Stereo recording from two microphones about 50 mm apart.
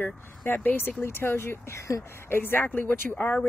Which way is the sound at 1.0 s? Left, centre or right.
Left.